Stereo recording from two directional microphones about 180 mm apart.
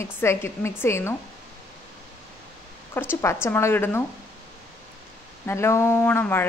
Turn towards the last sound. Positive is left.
turn(degrees=10)  # may be behind; listen again after turning